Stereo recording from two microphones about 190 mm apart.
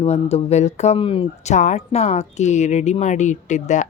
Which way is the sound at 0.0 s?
35° left (ahead or behind).